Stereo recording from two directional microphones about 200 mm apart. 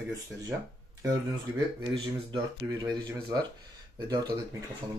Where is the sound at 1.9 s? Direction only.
25° right (ahead or behind).